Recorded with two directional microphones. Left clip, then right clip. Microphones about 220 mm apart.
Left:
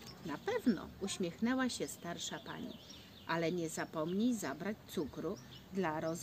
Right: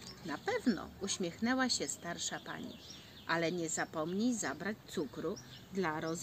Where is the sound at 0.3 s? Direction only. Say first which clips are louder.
Right 1 dB; 20° left (ahead or behind).